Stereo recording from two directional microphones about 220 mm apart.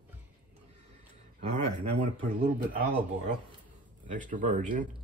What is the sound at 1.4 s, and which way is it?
Speech, 30° right (ahead or behind).